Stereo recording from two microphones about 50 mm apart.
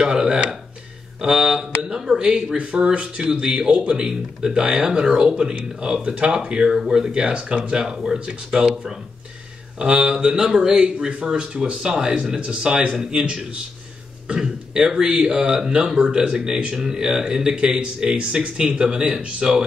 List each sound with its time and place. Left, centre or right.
0.0 s a sound: centre
2.6 s speech: right
10.0 s speech: centre
16.7 s speech: centre